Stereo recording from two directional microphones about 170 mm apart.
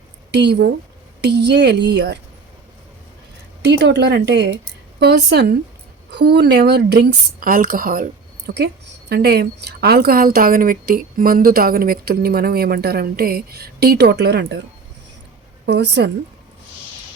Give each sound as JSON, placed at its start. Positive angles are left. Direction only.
{"t": 0.3, "sound": "a woman's voice", "side_deg": -75}
{"t": 3.6, "sound": "speech", "side_deg": -90}
{"t": 4.9, "sound": "a woman's voice", "side_deg": -75}
{"t": 8.4, "sound": "a woman's voice", "side_deg": -70}
{"t": 15.6, "sound": "speech", "side_deg": -85}